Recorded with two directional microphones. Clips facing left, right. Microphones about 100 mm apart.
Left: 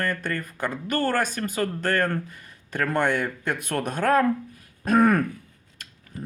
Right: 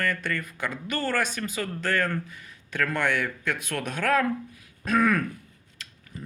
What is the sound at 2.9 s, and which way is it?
Speech, 45° left (ahead or behind).